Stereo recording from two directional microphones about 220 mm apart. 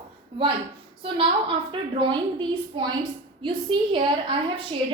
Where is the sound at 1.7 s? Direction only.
20° right (ahead or behind).